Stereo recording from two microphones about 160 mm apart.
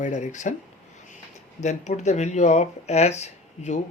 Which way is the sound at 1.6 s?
45° left (ahead or behind).